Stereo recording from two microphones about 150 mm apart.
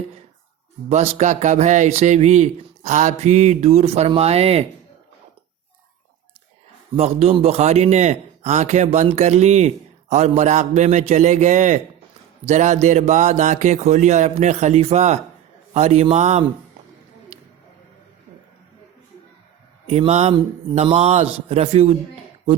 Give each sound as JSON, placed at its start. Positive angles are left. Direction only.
{"t": 0.9, "sound": "speech", "side_deg": -50}
{"t": 6.9, "sound": "speech", "side_deg": -45}
{"t": 19.9, "sound": "speech", "side_deg": -45}